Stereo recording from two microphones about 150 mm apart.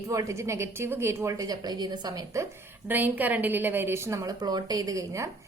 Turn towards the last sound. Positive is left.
turn(degrees=-20)  # may be behind; listen again after turning